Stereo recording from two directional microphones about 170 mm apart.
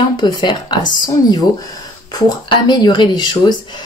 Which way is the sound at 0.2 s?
25° left (ahead or behind).